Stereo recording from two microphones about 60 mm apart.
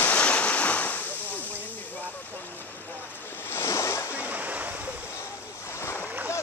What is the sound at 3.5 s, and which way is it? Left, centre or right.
Waves, left.